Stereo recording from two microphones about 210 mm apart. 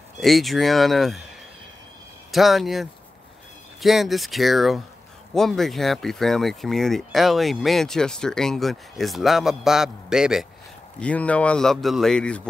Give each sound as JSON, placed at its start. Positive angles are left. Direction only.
{"t": 0.2, "sound": "speech", "side_deg": 0}
{"t": 2.3, "sound": "speech", "side_deg": 0}